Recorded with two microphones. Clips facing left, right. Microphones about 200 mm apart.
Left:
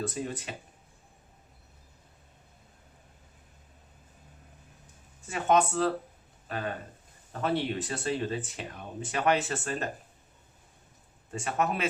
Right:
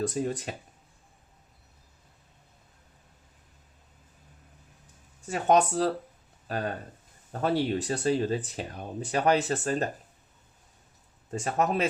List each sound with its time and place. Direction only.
0.0 s speech: 40° right (ahead or behind)
5.3 s speech: 40° right (ahead or behind)
11.3 s speech: 35° right (ahead or behind)